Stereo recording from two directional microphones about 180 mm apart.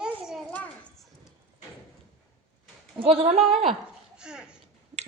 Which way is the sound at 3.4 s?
Centre (ahead or behind).